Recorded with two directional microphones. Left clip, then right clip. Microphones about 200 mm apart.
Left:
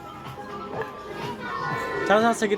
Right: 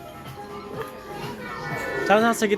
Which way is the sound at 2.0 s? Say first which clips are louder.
Right 1 dB; 10° right (ahead or behind).